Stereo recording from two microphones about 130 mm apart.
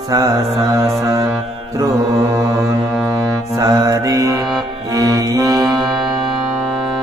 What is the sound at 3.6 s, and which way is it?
Mantra, 25° right (ahead or behind).